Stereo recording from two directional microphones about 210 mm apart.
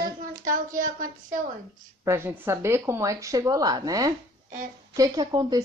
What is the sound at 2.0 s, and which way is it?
A woman's voice, 10° right (ahead or behind).